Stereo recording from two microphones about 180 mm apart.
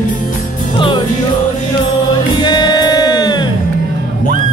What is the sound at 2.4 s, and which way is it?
Music, 25° left (ahead or behind).